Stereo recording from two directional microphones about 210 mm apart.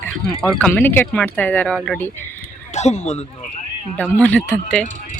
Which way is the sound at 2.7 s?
30° left (ahead or behind).